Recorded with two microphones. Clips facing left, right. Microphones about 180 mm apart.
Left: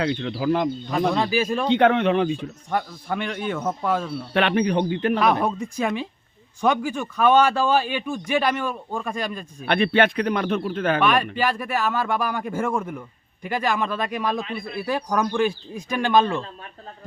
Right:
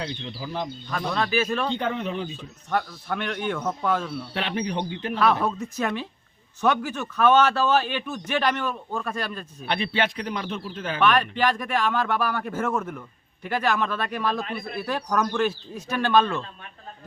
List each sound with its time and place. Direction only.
0.0 s speech: 65° left (ahead or behind)
0.9 s a man's voice: 15° left (ahead or behind)
1.7 s a man's voice: 70° left (ahead or behind)
2.6 s a man's voice: 10° left (ahead or behind)
4.4 s speech: 65° left (ahead or behind)
5.2 s a man's voice: 15° left (ahead or behind)
9.6 s speech: 55° left (ahead or behind)
11.0 s a man's voice: 10° left (ahead or behind)